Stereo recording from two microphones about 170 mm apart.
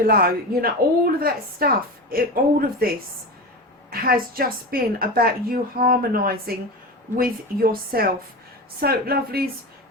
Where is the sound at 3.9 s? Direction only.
60° right (ahead or behind).